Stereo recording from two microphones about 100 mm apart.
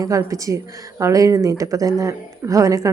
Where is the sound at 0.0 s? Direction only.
35° right (ahead or behind).